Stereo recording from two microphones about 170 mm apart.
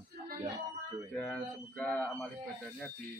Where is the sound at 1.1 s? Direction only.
Centre (ahead or behind).